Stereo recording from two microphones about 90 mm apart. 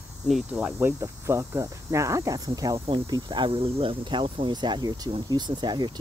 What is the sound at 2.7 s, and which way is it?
Speech, 90° right.